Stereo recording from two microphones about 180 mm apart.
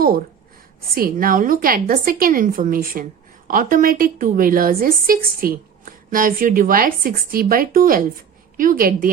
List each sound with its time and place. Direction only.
0.9 s a woman's voice: 55° right (ahead or behind)